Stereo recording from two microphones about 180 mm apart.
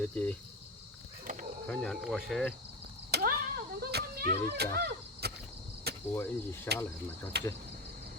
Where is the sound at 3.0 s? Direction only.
60° right (ahead or behind).